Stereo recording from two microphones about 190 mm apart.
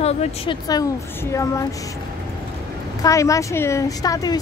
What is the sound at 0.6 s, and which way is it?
Speech, 15° left (ahead or behind).